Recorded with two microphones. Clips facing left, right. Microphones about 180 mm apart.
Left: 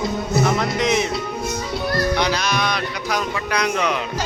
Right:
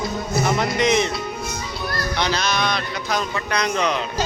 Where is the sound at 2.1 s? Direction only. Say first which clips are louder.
Left 2 dB; 10° left (ahead or behind).